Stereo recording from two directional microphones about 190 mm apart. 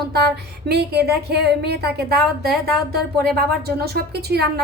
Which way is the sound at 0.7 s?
60° right (ahead or behind).